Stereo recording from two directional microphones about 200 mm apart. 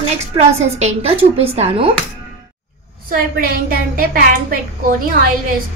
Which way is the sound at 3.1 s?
45° right (ahead or behind).